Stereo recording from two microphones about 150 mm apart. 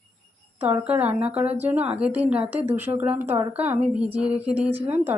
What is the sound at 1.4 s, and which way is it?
Speech, 45° right (ahead or behind).